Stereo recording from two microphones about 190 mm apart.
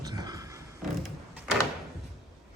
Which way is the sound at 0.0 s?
20° right (ahead or behind).